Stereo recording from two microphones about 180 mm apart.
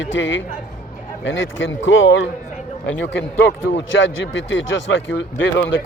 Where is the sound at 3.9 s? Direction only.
90° left.